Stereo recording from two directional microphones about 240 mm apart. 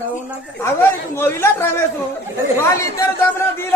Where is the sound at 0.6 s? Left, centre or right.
Centre.